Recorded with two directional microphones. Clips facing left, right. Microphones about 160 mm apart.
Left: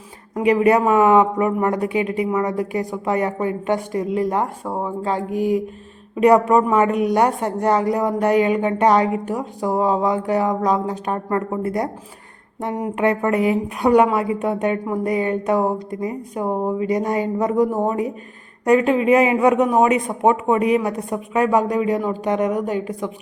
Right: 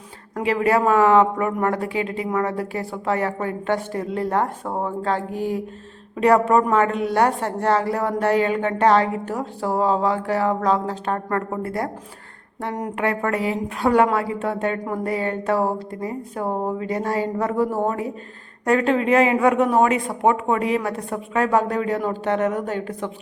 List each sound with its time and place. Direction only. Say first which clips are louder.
0.4 s a woman's voice: left 4 dB; 20° left (ahead or behind)
13.0 s a woman's voice: left 5 dB; 20° left (ahead or behind)